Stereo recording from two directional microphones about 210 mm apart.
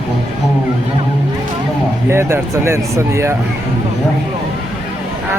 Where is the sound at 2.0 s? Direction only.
10° right (ahead or behind).